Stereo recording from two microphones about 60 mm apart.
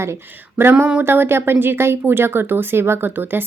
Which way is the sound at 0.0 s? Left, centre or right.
Right.